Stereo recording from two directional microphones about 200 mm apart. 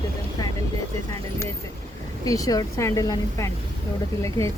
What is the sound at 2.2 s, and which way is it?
Speech, 15° left (ahead or behind).